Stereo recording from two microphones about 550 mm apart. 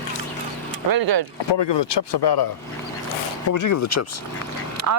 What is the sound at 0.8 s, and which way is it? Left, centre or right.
Speech, right.